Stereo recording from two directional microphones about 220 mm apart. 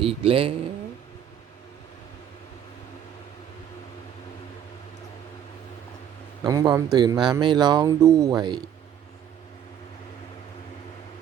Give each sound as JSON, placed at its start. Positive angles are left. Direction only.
{"t": 0.0, "sound": "speech", "side_deg": -25}
{"t": 6.4, "sound": "speech", "side_deg": -15}